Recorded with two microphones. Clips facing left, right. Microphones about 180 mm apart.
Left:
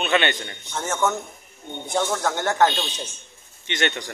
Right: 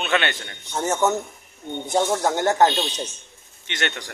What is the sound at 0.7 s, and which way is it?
A man's voice, 20° right (ahead or behind).